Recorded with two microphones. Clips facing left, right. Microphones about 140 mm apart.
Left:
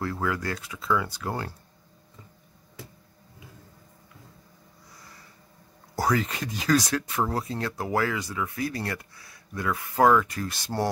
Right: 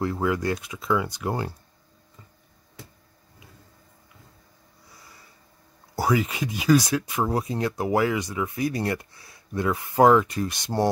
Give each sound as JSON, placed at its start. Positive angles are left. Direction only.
{"t": 0.0, "sound": "speech", "side_deg": -20}
{"t": 5.9, "sound": "speech", "side_deg": -10}